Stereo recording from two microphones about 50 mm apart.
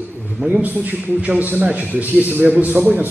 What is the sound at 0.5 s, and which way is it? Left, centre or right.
A man's voice, right.